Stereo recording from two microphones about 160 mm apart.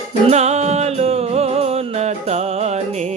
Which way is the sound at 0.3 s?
45° right (ahead or behind).